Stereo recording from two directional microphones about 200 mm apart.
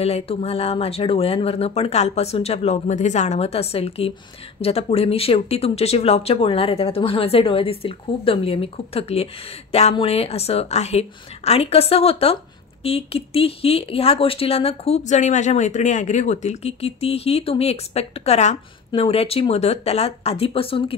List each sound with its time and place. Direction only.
0.0 s speech: 30° left (ahead or behind)